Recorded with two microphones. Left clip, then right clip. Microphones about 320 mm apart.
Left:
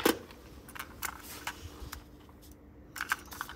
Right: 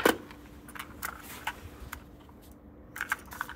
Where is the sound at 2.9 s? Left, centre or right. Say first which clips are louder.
Right 1 dB; centre.